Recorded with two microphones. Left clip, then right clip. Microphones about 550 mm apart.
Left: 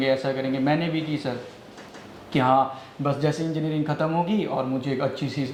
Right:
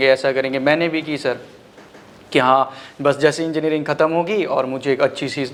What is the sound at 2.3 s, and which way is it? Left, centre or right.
Speech, right.